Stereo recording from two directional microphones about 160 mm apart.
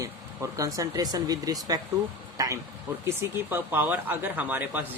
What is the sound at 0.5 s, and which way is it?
Speech, 20° right (ahead or behind).